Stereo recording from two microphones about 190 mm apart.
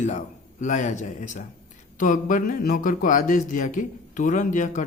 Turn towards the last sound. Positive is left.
turn(degrees=40)  # may be behind; listen again after turning